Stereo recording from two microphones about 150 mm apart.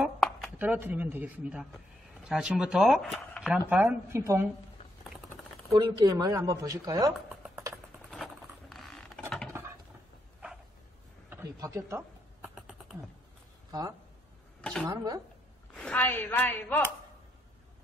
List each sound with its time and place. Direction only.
0.6 s speech: 10° right (ahead or behind)
4.2 s speech: 20° right (ahead or behind)
5.7 s speech: 25° right (ahead or behind)
7.4 s music: 15° right (ahead or behind)
8.1 s vehicle: centre (ahead or behind)
11.2 s a sound: 20° right (ahead or behind)
13.7 s speech: 25° right (ahead or behind)
14.6 s a sound: 5° left (ahead or behind)
14.9 s speech: 25° right (ahead or behind)
15.7 s a woman's voice: 10° left (ahead or behind)